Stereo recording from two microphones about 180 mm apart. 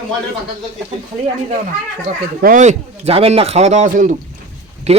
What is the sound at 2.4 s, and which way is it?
Speech, 45° right (ahead or behind).